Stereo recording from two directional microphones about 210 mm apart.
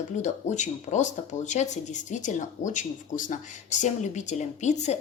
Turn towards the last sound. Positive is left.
turn(degrees=35)  # may be behind; listen again after turning